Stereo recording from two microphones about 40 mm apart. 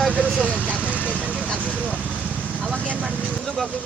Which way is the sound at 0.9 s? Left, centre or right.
Left.